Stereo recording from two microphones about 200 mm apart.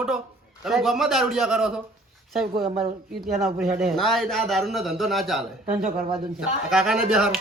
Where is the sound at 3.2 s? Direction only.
Centre (ahead or behind).